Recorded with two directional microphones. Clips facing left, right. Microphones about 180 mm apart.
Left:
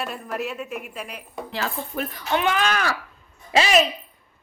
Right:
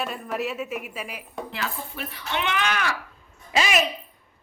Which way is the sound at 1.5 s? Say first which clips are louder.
Left 7 dB; 40° left (ahead or behind).